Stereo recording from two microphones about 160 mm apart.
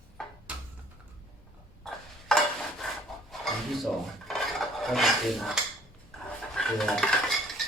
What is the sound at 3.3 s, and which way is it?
Filing, centre (ahead or behind).